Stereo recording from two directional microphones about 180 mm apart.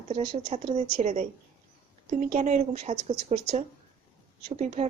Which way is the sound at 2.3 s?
40° right (ahead or behind).